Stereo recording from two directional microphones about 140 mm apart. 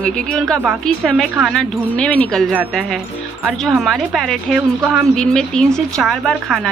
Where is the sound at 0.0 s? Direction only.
5° left (ahead or behind).